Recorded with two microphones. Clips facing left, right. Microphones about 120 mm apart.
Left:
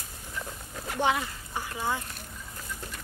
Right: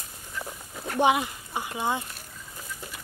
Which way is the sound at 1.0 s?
15° right (ahead or behind).